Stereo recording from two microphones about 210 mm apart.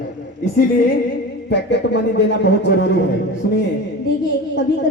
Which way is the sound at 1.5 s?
55° left (ahead or behind).